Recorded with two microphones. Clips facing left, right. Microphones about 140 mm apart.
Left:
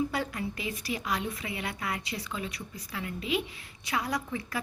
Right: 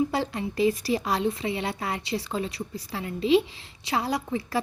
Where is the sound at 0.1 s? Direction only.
30° right (ahead or behind).